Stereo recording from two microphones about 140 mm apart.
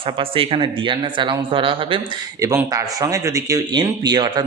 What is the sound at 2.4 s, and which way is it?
Speech, 25° right (ahead or behind).